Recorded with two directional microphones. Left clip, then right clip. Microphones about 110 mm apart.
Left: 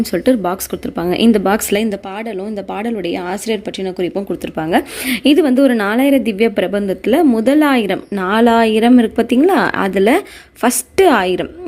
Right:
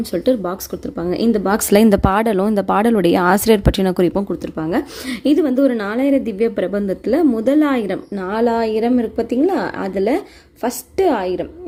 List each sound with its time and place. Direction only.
0.0 s a woman's voice: 15° left (ahead or behind)
1.7 s speech: 80° right
4.5 s speech: 5° left (ahead or behind)
5.0 s a woman's voice: 15° left (ahead or behind)
8.1 s a woman's voice: 30° left (ahead or behind)